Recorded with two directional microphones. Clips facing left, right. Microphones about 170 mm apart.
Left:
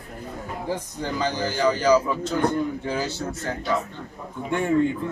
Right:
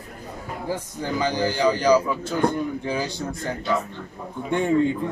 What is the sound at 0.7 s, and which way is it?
A man's voice, 10° right (ahead or behind).